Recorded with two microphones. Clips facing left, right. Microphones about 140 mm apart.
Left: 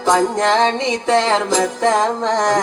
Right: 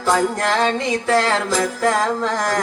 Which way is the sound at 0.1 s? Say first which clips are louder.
Left 3 dB; 20° left (ahead or behind).